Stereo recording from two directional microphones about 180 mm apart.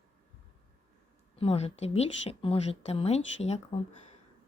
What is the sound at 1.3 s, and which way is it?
Speech, 35° left (ahead or behind).